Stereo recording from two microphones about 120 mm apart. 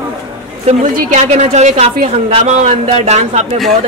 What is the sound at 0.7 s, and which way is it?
Speech, 65° right (ahead or behind).